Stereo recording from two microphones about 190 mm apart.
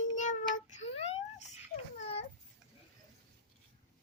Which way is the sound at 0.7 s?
35° left (ahead or behind).